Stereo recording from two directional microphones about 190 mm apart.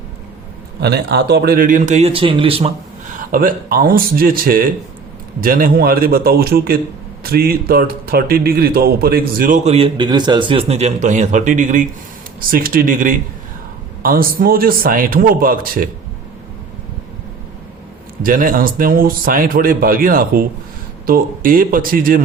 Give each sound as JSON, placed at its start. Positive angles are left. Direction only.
{"t": 0.8, "sound": "a man's voice", "side_deg": -60}
{"t": 3.3, "sound": "a man's voice", "side_deg": -50}
{"t": 18.2, "sound": "a man's voice", "side_deg": -45}